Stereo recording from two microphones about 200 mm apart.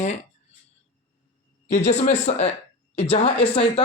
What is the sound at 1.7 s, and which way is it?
Speech, 35° left (ahead or behind).